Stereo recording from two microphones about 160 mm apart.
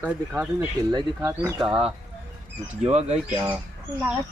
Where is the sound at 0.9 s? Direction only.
20° right (ahead or behind).